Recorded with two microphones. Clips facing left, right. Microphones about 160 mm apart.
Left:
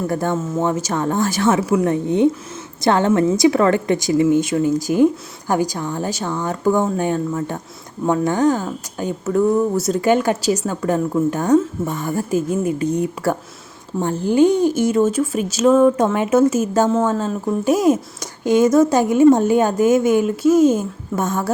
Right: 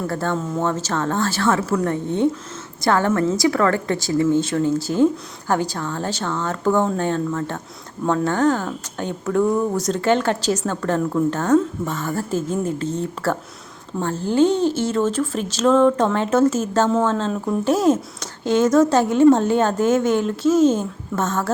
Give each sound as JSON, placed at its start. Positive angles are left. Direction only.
{"t": 0.1, "sound": "a woman's voice", "side_deg": 15}